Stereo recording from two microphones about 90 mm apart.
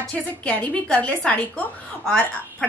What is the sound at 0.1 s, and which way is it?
A woman's voice, 15° left (ahead or behind).